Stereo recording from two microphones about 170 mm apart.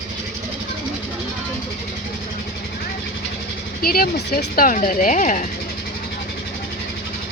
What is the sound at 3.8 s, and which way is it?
Speech, 60° left (ahead or behind).